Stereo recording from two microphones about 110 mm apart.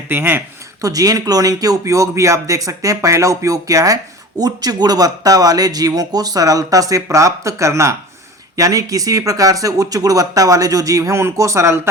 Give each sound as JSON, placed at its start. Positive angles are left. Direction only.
{"t": 0.1, "sound": "speech", "side_deg": -20}